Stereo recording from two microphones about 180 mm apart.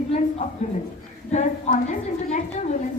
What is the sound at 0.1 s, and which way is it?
Speech, 35° left (ahead or behind).